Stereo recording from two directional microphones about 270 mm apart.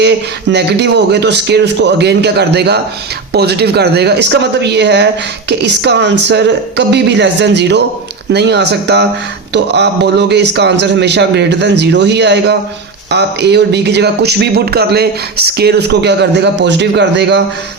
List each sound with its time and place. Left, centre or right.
0.5 s a man's voice: right